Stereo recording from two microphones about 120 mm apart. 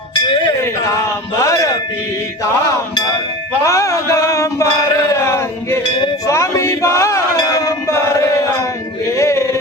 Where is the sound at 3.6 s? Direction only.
25° left (ahead or behind).